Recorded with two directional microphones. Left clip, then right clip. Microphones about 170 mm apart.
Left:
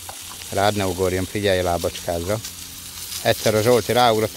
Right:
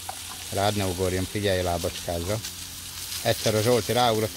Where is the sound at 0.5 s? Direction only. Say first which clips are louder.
Left 6 dB; 40° left (ahead or behind).